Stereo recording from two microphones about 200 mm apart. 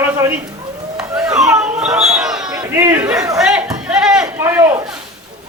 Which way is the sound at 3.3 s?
5° right (ahead or behind).